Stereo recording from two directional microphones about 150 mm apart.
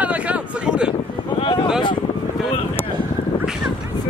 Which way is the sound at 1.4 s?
35° left (ahead or behind).